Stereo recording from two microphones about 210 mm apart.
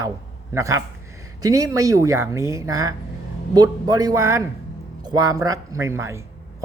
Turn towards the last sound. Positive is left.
turn(degrees=-15)  # may be behind; listen again after turning